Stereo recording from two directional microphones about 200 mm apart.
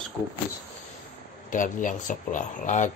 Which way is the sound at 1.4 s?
40° left (ahead or behind).